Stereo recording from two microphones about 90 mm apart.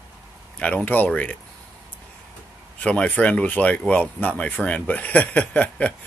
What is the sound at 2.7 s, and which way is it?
Speech, 15° left (ahead or behind).